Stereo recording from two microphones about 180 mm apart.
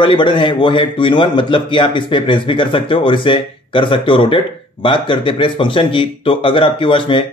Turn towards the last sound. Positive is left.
turn(degrees=30)  # may be behind; listen again after turning